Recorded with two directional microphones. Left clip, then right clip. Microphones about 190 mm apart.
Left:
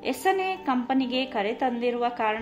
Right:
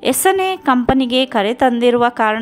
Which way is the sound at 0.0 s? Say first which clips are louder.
Right 10 dB; 35° right (ahead or behind).